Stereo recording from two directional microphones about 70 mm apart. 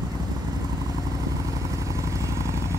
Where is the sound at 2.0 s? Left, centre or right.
Right.